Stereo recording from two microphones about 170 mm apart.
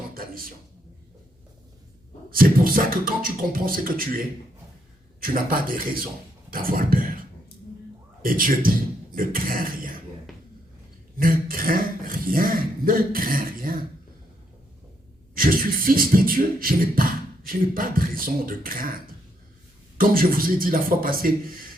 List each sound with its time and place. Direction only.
0.1 s a sound: 55° right (ahead or behind)
2.3 s beatboxing: 55° right (ahead or behind)
5.2 s beatboxing: 55° right (ahead or behind)
6.5 s speech: 55° right (ahead or behind)
8.2 s beatboxing: 55° right (ahead or behind)
9.1 s speech: 55° right (ahead or behind)
10.3 s a sound: centre (ahead or behind)
11.2 s beatboxing: 55° right (ahead or behind)
15.4 s beatboxing: 55° right (ahead or behind)